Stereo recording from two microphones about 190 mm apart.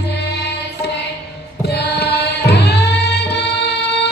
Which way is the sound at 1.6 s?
60° left (ahead or behind).